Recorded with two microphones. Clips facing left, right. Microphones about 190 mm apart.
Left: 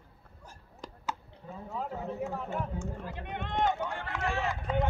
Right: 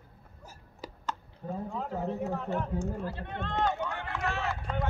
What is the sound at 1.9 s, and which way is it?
Speech, 40° right (ahead or behind).